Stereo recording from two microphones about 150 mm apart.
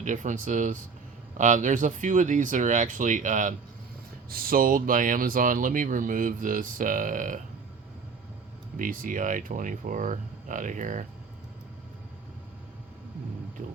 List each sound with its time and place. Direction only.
0.0 s speech: 55° right (ahead or behind)
4.3 s speech: 75° right (ahead or behind)
8.8 s speech: 65° right (ahead or behind)